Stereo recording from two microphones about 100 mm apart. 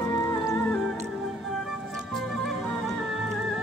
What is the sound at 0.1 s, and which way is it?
Music, 20° left (ahead or behind).